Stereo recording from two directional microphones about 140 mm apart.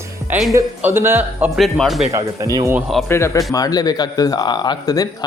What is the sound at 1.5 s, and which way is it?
Speech, centre (ahead or behind).